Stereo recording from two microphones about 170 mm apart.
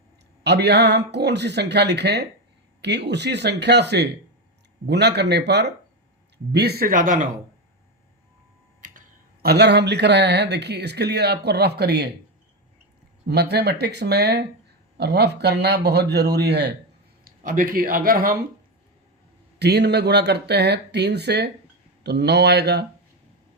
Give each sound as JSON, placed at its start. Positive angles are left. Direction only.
{"t": 0.4, "sound": "speech", "side_deg": -80}
{"t": 8.8, "sound": "speech", "side_deg": -50}
{"t": 13.2, "sound": "speech", "side_deg": -75}
{"t": 17.2, "sound": "speech", "side_deg": -55}
{"t": 19.5, "sound": "speech", "side_deg": -75}